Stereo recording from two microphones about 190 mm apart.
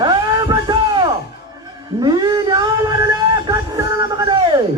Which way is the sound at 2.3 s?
20° right (ahead or behind).